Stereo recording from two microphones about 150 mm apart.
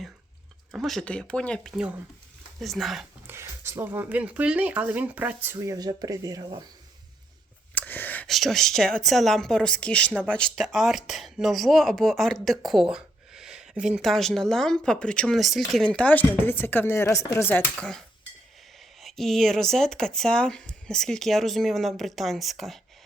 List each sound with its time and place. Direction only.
0.7 s speech: centre (ahead or behind)
3.2 s speech: 15° right (ahead or behind)
7.8 s whispering: 10° left (ahead or behind)
8.3 s speech: centre (ahead or behind)
19.0 s speech: centre (ahead or behind)